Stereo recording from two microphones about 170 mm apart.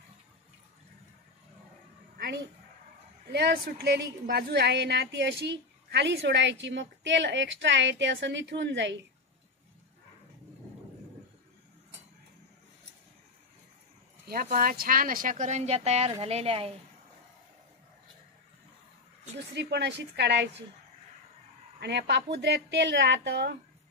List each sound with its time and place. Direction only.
2.1 s a sound: 75° right (ahead or behind)
3.3 s a woman's voice: 70° right (ahead or behind); by 9.0 s 90° right
14.2 s speech: 60° right (ahead or behind); by 16.7 s 35° right (ahead or behind)
19.5 s a woman's voice: 85° right
21.7 s a woman's voice: 80° right